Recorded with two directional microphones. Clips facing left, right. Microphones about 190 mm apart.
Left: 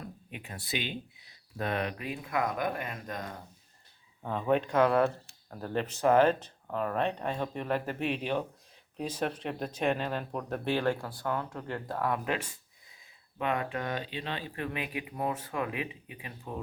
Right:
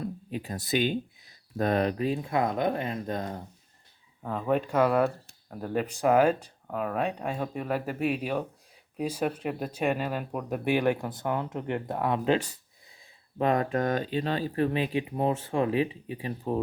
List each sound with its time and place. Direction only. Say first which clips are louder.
0.0 s speech: right 10 dB; 35° right (ahead or behind)
4.2 s speech: right 1 dB; centre (ahead or behind); by 12.5 s 25° right (ahead or behind)
13.4 s speech: right 7 dB; 40° right (ahead or behind)